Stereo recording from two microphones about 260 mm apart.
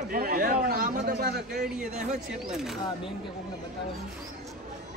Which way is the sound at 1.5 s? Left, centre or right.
Centre.